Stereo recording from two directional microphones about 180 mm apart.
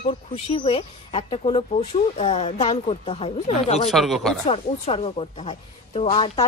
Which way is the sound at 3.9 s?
Centre (ahead or behind).